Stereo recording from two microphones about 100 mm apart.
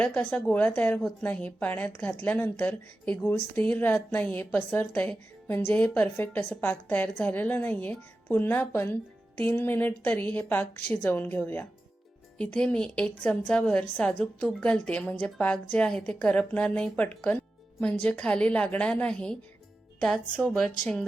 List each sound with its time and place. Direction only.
0.3 s a woman's voice: 15° left (ahead or behind)